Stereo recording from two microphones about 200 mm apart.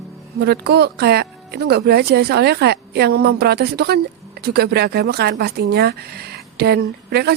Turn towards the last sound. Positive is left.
turn(degrees=-55)  # may be behind; listen again after turning